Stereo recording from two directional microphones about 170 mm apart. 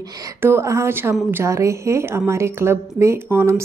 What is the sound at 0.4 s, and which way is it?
A woman's voice, 15° right (ahead or behind).